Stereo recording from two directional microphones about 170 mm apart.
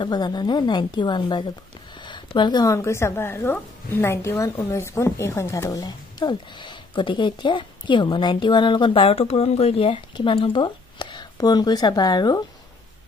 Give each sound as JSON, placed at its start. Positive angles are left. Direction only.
{"t": 0.0, "sound": "speech", "side_deg": 25}